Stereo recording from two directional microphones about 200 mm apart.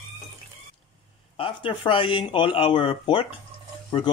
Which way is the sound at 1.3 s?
25° left (ahead or behind).